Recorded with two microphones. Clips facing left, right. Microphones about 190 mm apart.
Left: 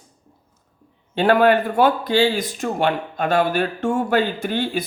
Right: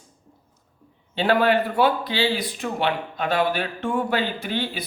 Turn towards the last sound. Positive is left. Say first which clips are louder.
# left 5 dB
turn(degrees=45)  # may be behind; listen again after turning